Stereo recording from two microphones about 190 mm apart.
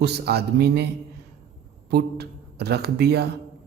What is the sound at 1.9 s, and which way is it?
Speech, 60° right (ahead or behind).